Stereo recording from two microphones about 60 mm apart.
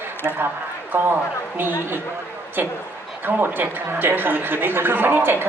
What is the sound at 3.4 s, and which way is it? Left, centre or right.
A man's voice, right.